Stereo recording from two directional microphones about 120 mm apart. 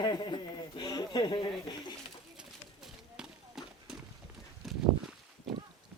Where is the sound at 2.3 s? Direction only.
5° right (ahead or behind).